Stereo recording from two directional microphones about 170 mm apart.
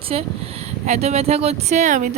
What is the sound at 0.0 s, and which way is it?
Speech, 35° right (ahead or behind).